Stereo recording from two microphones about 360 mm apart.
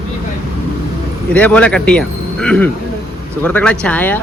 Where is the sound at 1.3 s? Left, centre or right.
Centre.